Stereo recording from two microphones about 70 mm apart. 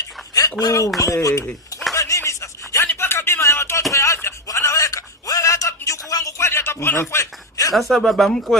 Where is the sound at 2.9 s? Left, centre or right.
Left.